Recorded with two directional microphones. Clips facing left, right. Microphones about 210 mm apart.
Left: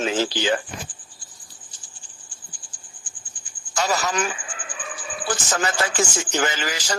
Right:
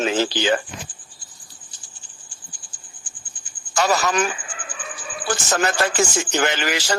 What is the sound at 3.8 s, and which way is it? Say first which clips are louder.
Speech: right 4 dB; 65° right (ahead or behind).